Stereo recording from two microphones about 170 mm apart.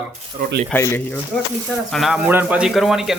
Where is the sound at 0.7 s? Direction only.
15° left (ahead or behind).